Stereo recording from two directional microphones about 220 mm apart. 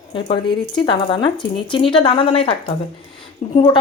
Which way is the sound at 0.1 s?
20° left (ahead or behind).